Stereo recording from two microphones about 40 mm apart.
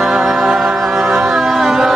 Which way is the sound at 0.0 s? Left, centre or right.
Centre.